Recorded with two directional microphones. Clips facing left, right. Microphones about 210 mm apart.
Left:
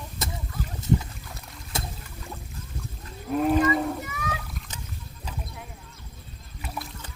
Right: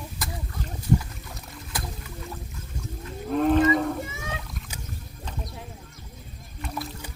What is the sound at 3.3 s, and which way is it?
Cattle, 5° left (ahead or behind).